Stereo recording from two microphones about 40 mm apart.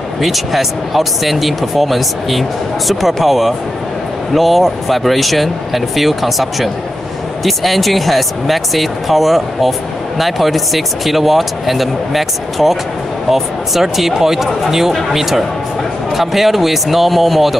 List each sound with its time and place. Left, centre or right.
0.2 s speech: centre